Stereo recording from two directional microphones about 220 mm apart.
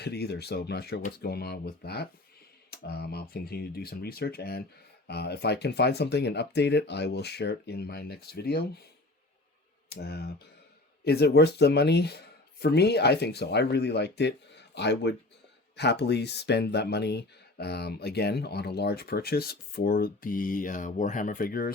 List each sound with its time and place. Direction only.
0.0 s speech: 45° left (ahead or behind)
9.9 s speech: 45° left (ahead or behind)